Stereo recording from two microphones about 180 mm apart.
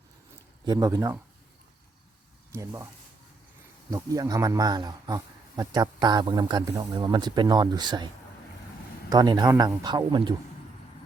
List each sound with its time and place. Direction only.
0.6 s speech: 20° right (ahead or behind)
2.5 s speech: 15° right (ahead or behind)
3.8 s speech: 20° right (ahead or behind)
9.0 s speech: 25° right (ahead or behind)